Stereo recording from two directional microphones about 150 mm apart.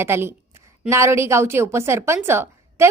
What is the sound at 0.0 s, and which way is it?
Speech, 15° right (ahead or behind).